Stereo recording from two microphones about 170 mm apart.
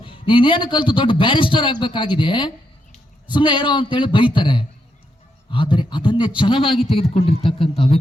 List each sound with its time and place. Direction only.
0.0 s a man's voice: 30° left (ahead or behind)